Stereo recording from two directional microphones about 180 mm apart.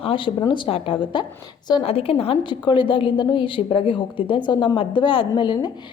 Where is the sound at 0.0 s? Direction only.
30° left (ahead or behind).